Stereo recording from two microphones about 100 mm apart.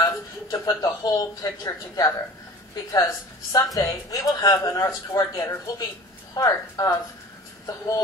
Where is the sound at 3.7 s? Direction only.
35° left (ahead or behind).